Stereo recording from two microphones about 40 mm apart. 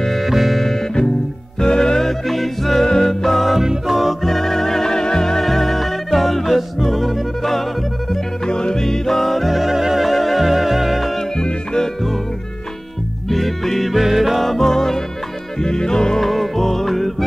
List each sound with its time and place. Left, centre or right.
0.0 s music: centre
0.6 s music: centre
3.6 s music: centre
4.2 s music: centre
8.5 s music: centre
11.3 s music: centre
13.3 s music: centre
16.2 s music: centre